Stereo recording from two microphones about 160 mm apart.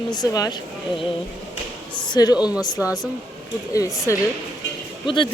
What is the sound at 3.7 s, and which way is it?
Speech, 20° left (ahead or behind).